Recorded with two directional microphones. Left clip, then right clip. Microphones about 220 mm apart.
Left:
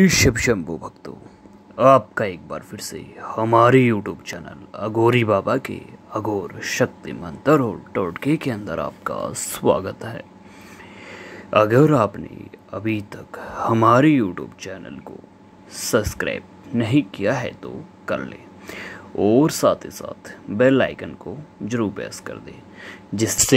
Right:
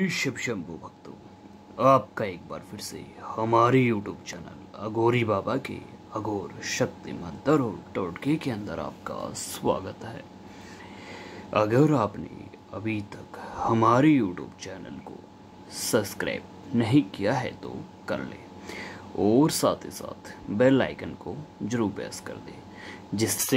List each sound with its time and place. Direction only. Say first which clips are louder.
0.0 s speech: left 12 dB; 30° left (ahead or behind)
1.8 s speech: left 7 dB; 20° left (ahead or behind)
11.1 s a sound: left 8 dB; 15° left (ahead or behind)
12.7 s speech: left 7 dB; 20° left (ahead or behind)